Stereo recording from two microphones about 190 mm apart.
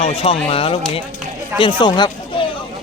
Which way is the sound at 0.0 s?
30° left (ahead or behind).